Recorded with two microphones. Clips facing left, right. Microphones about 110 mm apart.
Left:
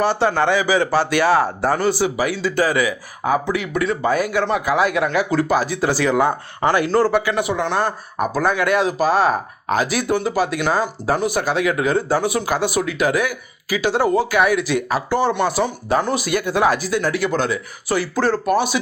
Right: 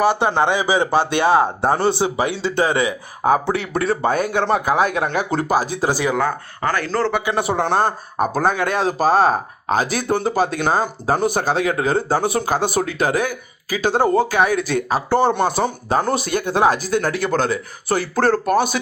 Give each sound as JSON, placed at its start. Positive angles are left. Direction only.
{"t": 0.0, "sound": "a man's voice", "side_deg": -15}
{"t": 5.9, "sound": "speech", "side_deg": -15}
{"t": 6.1, "sound": "speech", "side_deg": 15}
{"t": 7.3, "sound": "speech", "side_deg": -35}
{"t": 14.3, "sound": "speech", "side_deg": -30}